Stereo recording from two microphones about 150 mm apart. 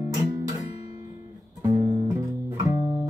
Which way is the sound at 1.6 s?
25° right (ahead or behind).